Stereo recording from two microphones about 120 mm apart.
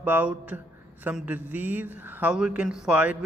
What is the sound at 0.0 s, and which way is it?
Speech, 15° right (ahead or behind).